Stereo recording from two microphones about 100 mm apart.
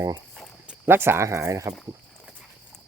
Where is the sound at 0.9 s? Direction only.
20° right (ahead or behind).